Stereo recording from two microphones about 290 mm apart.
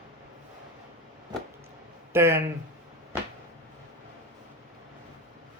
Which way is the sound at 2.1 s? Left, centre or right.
Centre.